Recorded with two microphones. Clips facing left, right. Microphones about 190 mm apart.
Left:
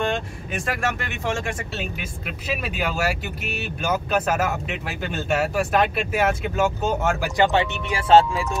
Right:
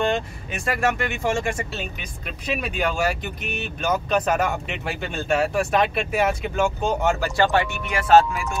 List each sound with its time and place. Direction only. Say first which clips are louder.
0.0 s speech: right 2 dB; centre (ahead or behind)
7.2 s speech: left 1 dB; 20° left (ahead or behind)